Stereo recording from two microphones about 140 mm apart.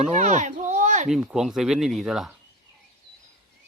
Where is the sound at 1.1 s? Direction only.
5° right (ahead or behind).